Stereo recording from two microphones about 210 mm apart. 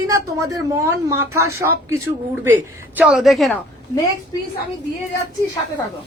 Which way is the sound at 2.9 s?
5° right (ahead or behind).